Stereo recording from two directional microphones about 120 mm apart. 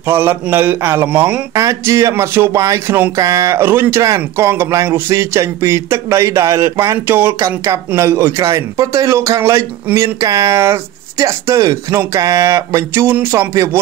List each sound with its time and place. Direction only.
0.0 s speech: 20° right (ahead or behind)
1.5 s speech: 25° right (ahead or behind)